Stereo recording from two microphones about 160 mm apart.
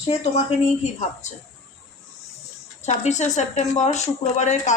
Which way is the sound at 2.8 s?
45° left (ahead or behind).